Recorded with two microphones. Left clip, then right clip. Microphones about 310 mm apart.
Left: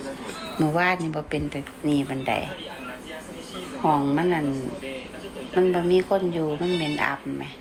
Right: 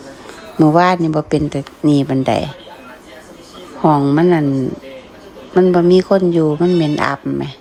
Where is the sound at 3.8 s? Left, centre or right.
Right.